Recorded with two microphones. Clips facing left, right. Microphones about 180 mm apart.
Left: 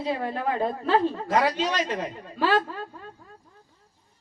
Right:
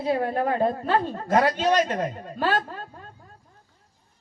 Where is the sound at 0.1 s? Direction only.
50° right (ahead or behind).